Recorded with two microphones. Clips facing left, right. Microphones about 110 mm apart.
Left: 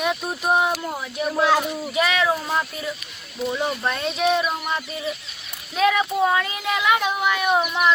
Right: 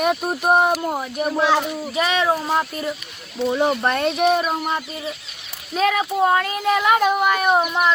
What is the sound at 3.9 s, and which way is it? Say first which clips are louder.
Speech: right 4 dB; 55° right (ahead or behind).